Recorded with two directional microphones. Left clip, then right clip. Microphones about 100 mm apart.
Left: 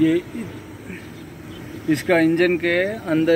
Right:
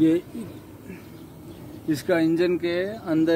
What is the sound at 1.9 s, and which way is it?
Speech, 45° right (ahead or behind).